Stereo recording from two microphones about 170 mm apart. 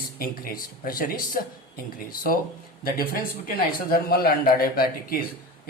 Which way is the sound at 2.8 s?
60° left (ahead or behind).